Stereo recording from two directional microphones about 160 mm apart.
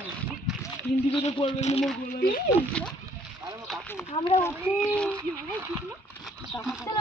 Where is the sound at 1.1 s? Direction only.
35° left (ahead or behind).